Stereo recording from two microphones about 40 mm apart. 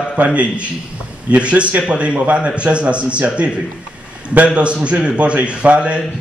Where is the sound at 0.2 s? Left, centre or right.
Right.